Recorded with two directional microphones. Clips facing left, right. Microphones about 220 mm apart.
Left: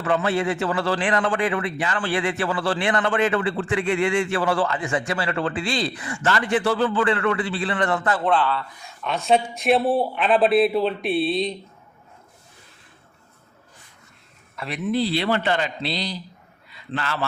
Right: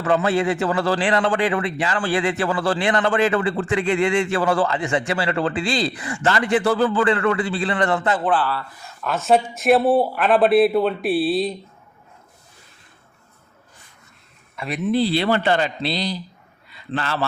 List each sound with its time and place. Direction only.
0.1 s speech: 35° right (ahead or behind)
4.3 s speech: 40° right (ahead or behind)
8.2 s speech: 5° right (ahead or behind)
14.7 s speech: 30° right (ahead or behind)
16.9 s speech: 30° right (ahead or behind)